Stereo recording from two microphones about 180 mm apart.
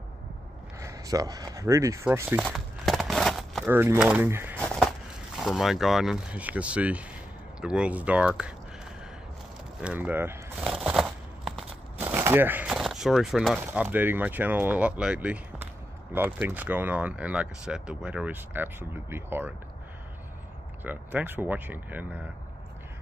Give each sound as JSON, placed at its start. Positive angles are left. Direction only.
{"t": 0.7, "sound": "speech", "side_deg": -20}
{"t": 2.4, "sound": "crumpling", "side_deg": 0}
{"t": 3.6, "sound": "speech", "side_deg": -15}
{"t": 9.8, "sound": "speech", "side_deg": -5}
{"t": 10.6, "sound": "a sound", "side_deg": -5}
{"t": 12.0, "sound": "speech", "side_deg": -10}
{"t": 20.8, "sound": "speech", "side_deg": -10}